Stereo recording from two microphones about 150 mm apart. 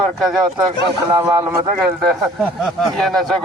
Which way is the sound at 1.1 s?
20° right (ahead or behind).